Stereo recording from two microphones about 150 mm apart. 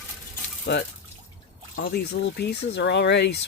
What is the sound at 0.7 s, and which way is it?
Speech, 90° left.